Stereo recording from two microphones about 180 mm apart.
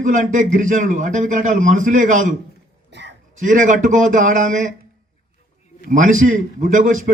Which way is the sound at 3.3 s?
45° right (ahead or behind).